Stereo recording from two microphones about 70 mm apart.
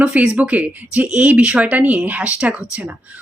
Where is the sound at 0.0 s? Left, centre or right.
Centre.